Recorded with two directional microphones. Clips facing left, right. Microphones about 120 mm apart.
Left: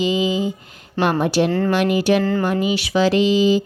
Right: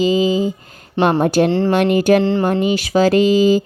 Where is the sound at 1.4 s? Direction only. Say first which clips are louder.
Right 3 dB; 30° right (ahead or behind).